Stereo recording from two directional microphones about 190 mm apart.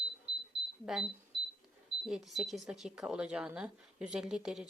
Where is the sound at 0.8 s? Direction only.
Centre (ahead or behind).